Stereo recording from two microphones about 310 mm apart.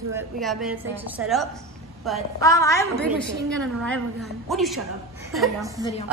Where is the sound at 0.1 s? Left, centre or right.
Centre.